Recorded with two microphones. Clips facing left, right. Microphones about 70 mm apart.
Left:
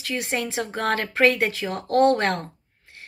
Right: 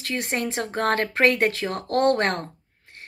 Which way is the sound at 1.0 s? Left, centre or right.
Right.